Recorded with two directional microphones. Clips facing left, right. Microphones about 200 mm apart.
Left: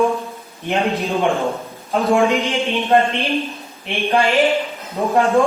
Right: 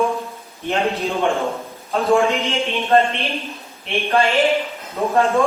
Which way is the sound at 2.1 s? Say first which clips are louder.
Left 2 dB; 15° left (ahead or behind).